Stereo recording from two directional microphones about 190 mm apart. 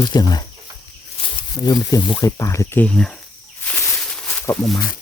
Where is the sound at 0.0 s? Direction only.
20° left (ahead or behind).